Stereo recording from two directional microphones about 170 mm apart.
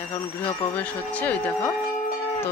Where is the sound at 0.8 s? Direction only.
10° left (ahead or behind).